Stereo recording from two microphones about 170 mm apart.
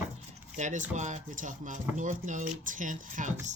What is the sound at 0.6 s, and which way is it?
Speech, 45° right (ahead or behind).